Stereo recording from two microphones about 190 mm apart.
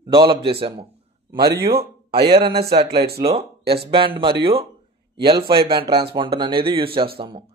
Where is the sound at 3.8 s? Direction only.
30° right (ahead or behind).